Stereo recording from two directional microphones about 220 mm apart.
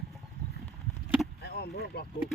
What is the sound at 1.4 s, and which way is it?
Speech, 45° left (ahead or behind).